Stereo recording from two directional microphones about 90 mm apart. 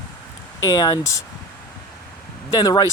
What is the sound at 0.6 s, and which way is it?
Speech, 45° left (ahead or behind).